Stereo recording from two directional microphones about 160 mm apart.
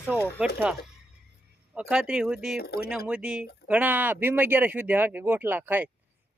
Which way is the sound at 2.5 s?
75° left (ahead or behind).